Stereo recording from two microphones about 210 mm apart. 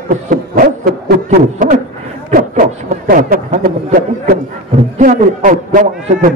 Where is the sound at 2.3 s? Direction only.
40° right (ahead or behind).